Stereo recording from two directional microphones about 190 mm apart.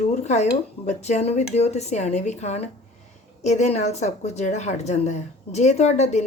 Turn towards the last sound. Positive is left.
turn(degrees=35)  # may be behind; listen again after turning